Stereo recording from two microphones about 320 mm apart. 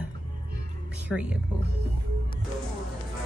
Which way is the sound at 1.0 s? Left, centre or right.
Centre.